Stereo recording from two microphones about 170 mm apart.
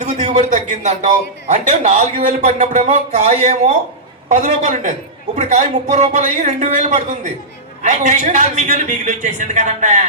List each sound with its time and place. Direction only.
0.0 s a man's voice: 45° right (ahead or behind)